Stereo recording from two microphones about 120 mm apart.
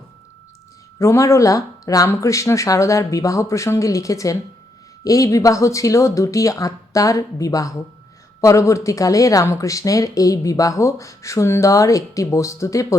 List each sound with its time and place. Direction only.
0.9 s speech: 25° left (ahead or behind)